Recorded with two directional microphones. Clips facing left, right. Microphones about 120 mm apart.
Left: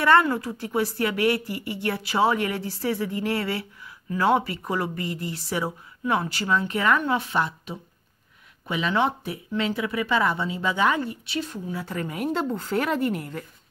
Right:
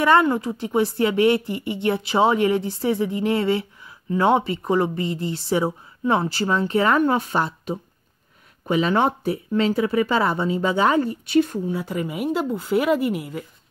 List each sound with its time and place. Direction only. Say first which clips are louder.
0.0 s a woman's voice: right 2 dB; 20° right (ahead or behind); by 11.6 s 50° right (ahead or behind)
11.6 s a woman's voice: right 5 dB; 20° right (ahead or behind)